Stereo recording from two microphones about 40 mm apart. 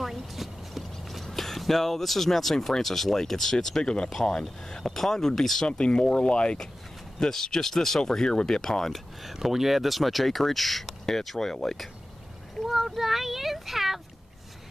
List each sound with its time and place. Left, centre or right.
0.0 s clip-clop: centre
1.2 s speech: centre
3.8 s speech: left
5.7 s speech: left
7.2 s speech: centre
9.2 s a child's voice: centre